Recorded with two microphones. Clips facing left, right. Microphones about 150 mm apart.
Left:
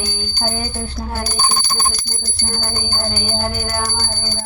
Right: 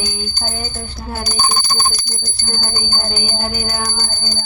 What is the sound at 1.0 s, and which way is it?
Bicycle bell, 20° left (ahead or behind).